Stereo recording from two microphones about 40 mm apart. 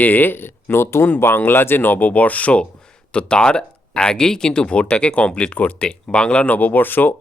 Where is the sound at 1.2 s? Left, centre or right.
Left.